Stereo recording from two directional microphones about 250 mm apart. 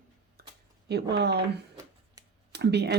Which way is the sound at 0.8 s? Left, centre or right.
Right.